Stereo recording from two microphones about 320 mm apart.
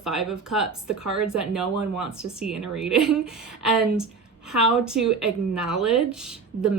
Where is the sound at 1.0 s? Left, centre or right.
Right.